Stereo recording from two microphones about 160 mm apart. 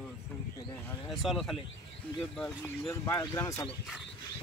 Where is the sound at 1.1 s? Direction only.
Centre (ahead or behind); by 3.7 s 20° left (ahead or behind).